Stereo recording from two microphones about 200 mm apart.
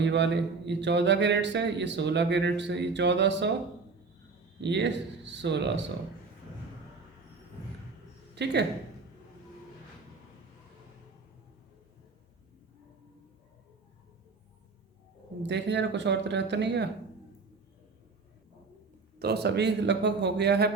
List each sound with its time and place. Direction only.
0.0 s speech: 60° right (ahead or behind)
4.6 s speech: 60° right (ahead or behind)
8.4 s speech: 60° right (ahead or behind)
15.4 s speech: 60° right (ahead or behind)
19.2 s speech: 55° right (ahead or behind)